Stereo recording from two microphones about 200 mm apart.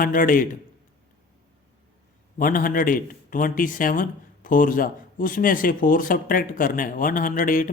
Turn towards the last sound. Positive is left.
turn(degrees=40)  # may be behind; listen again after turning